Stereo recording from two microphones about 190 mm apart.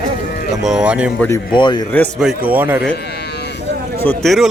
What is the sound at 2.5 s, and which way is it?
Speech, 10° right (ahead or behind).